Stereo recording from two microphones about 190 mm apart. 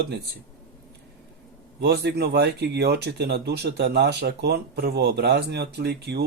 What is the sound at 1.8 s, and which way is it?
Speech, 60° right (ahead or behind).